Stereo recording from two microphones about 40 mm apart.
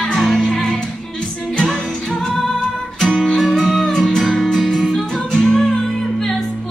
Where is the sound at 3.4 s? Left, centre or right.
Centre.